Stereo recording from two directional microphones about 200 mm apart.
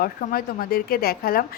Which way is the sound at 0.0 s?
45° left (ahead or behind).